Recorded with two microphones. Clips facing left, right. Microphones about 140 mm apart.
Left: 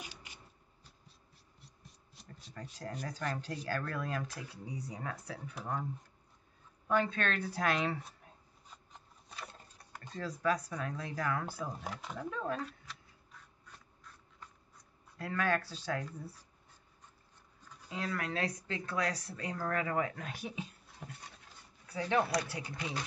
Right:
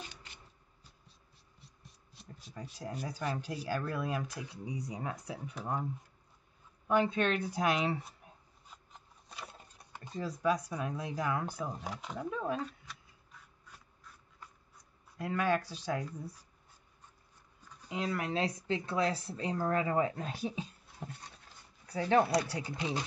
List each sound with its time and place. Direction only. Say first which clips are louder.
2.2 s a sound: right 2 dB; centre (ahead or behind)
2.5 s speech: right 1 dB; 10° right (ahead or behind)
6.9 s speech: right 3 dB; 15° right (ahead or behind)
9.3 s speech: even; 10° right (ahead or behind)
11.8 s speech: right 1 dB; centre (ahead or behind)
12.2 s speech: right 2 dB; 10° right (ahead or behind)
12.6 s duck: right 1 dB; centre (ahead or behind)
14.8 s speech: right 3 dB; 15° right (ahead or behind)
17.8 s speech: right 3 dB; 20° right (ahead or behind)